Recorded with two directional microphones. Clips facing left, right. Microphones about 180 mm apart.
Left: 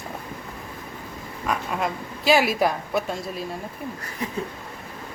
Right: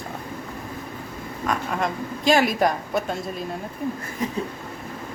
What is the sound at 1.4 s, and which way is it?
Speech, 5° left (ahead or behind).